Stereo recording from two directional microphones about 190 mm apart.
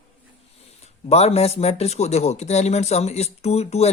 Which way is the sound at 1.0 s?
35° left (ahead or behind).